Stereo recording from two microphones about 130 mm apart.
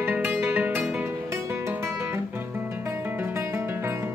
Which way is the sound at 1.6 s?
20° right (ahead or behind).